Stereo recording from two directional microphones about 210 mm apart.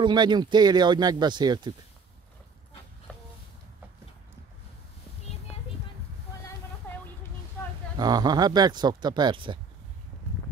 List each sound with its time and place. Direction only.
0.0 s speech: 20° right (ahead or behind)
6.8 s music: 10° left (ahead or behind)
8.0 s speech: 20° right (ahead or behind)